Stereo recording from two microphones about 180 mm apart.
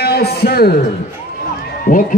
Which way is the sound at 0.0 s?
60° left (ahead or behind).